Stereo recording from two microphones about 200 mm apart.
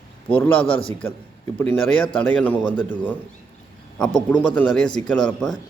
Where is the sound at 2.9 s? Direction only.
10° left (ahead or behind).